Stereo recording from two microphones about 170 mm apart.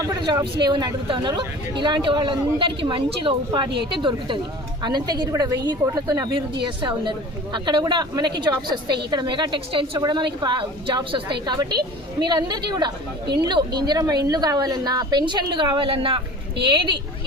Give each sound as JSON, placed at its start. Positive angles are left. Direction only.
{"t": 0.0, "sound": "a woman's voice", "side_deg": -20}